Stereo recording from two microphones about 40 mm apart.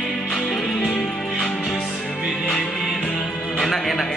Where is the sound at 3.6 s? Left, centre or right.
Centre.